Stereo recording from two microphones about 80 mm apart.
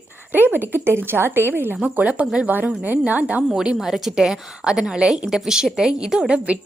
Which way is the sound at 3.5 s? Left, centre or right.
Centre.